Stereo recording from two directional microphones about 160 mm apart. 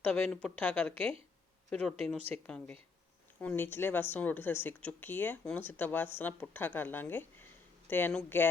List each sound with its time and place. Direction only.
0.0 s speech: 5° left (ahead or behind)